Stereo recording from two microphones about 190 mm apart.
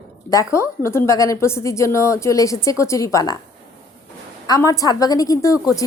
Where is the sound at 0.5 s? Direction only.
15° left (ahead or behind).